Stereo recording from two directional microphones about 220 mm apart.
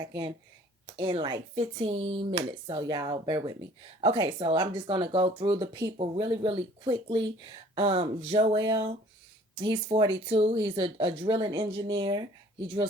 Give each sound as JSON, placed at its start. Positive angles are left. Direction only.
{"t": 0.9, "sound": "speech", "side_deg": -20}